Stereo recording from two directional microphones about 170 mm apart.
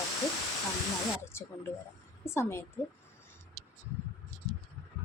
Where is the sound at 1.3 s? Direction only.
15° left (ahead or behind).